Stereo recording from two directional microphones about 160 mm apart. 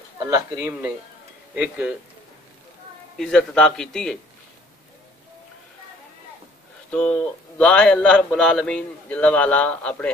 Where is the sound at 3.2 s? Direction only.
5° left (ahead or behind).